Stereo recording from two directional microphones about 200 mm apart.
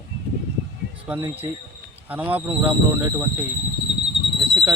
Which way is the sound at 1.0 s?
10° right (ahead or behind).